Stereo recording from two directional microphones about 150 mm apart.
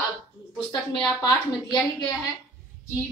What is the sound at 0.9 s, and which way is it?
Speech, 30° left (ahead or behind).